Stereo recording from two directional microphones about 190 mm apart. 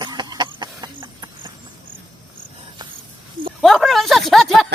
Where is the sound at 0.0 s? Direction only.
20° right (ahead or behind).